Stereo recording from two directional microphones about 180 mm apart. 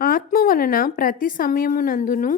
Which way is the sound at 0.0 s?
50° left (ahead or behind).